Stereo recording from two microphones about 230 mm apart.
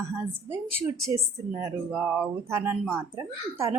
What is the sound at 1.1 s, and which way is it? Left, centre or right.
A woman's voice, centre.